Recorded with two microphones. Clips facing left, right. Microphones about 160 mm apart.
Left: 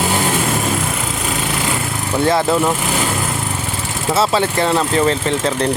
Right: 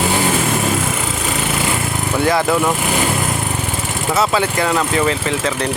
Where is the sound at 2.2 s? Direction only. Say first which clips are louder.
Left 1 dB; 25° left (ahead or behind).